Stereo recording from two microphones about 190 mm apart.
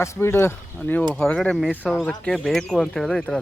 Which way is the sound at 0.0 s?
15° left (ahead or behind).